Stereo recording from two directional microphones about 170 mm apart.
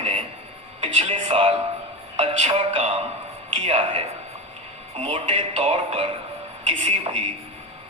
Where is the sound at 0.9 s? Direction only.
35° right (ahead or behind).